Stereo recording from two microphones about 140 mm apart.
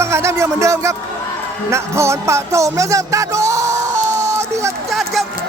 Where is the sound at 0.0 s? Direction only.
20° right (ahead or behind).